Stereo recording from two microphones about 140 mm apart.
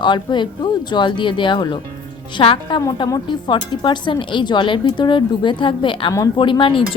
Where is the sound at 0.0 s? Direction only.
35° left (ahead or behind).